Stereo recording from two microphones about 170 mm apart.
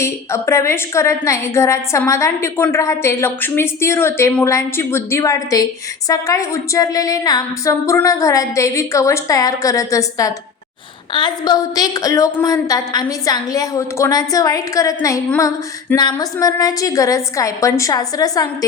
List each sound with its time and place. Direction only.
0.0 s a woman's voice: 15° left (ahead or behind)